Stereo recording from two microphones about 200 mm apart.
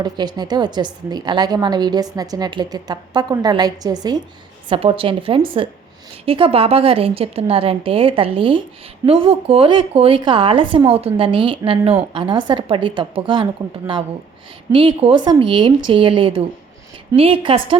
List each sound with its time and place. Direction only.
0.0 s a woman's voice: 20° right (ahead or behind)